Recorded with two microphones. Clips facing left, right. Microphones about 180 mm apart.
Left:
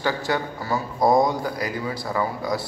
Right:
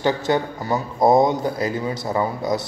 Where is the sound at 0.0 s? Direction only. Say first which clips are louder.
Right 4 dB; 20° right (ahead or behind).